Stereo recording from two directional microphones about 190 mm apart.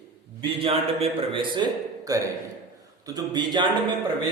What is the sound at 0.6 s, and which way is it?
A man's voice, 30° right (ahead or behind).